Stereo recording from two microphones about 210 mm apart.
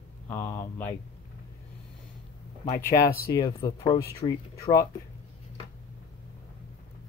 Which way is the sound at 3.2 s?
15° left (ahead or behind).